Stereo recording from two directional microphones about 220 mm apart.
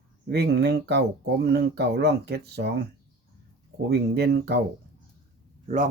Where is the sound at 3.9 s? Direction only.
50° right (ahead or behind).